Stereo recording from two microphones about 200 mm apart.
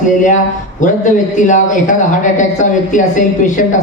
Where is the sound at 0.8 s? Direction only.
40° left (ahead or behind).